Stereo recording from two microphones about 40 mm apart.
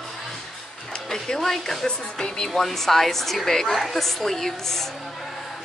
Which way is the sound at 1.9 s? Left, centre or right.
Centre.